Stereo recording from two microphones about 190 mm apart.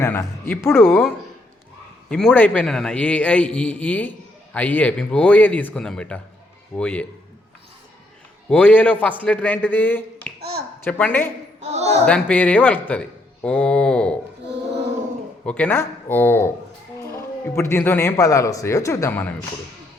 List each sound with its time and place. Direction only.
0.0 s speech: 15° left (ahead or behind)
2.0 s speech: 5° left (ahead or behind)
8.4 s speech: 5° left (ahead or behind)
11.6 s a man's voice: 35° right (ahead or behind)
12.0 s speech: 5° left (ahead or behind)